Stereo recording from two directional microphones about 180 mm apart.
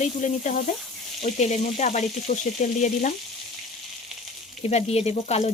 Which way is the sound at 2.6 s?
40° left (ahead or behind).